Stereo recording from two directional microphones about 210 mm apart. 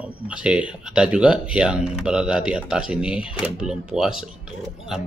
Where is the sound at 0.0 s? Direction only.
5° right (ahead or behind).